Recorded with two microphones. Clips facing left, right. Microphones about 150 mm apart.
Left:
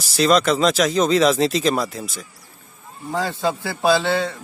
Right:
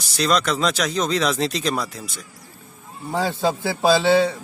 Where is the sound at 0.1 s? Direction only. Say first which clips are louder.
Left 4 dB; centre (ahead or behind).